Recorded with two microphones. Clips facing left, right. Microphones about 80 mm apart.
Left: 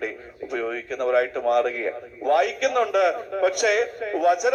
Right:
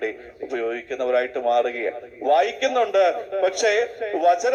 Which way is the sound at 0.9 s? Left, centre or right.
Left.